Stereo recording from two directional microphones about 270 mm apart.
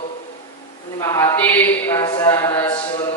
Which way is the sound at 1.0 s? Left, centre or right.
Centre.